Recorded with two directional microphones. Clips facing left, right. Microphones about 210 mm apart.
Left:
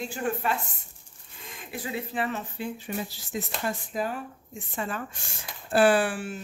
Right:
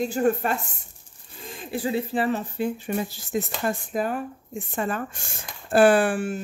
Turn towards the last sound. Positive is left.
turn(degrees=-50)  # may be behind; listen again after turning